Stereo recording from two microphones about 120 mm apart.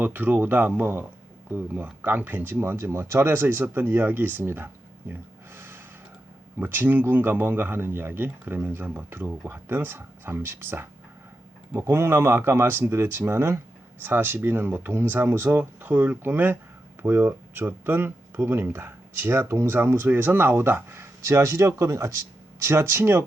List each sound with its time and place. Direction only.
0.0 s speech: 15° right (ahead or behind)
5.5 s gasp: 20° right (ahead or behind)
6.6 s speech: 15° right (ahead or behind)